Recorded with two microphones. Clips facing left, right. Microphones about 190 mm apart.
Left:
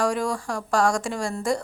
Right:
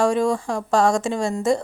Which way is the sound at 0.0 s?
25° right (ahead or behind).